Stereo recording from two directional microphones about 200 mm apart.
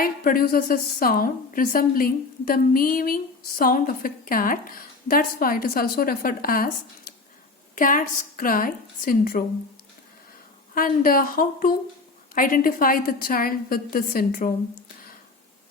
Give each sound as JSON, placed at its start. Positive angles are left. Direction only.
{"t": 0.0, "sound": "a woman's voice", "side_deg": 45}
{"t": 10.8, "sound": "a woman's voice", "side_deg": 45}